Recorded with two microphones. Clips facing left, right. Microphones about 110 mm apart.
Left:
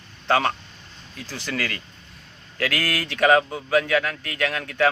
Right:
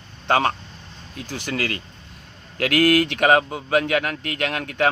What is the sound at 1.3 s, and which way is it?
Speech, 15° right (ahead or behind).